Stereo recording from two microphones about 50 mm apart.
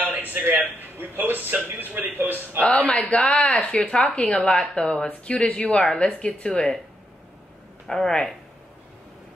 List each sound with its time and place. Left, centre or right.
0.0 s a man's voice: right
2.9 s speech: left
7.8 s speech: centre